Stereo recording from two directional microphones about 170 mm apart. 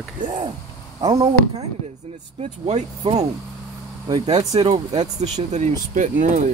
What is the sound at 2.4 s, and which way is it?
Speech, 35° right (ahead or behind).